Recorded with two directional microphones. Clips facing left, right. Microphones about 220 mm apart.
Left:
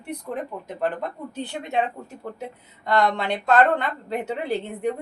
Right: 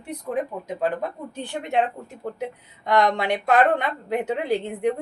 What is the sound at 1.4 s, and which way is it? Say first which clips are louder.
A woman's voice: right 2 dB; 15° right (ahead or behind).